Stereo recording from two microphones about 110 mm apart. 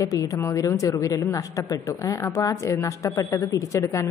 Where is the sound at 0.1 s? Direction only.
30° left (ahead or behind).